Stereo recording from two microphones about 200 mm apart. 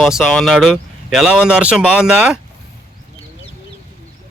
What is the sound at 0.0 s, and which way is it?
A man's voice, centre (ahead or behind).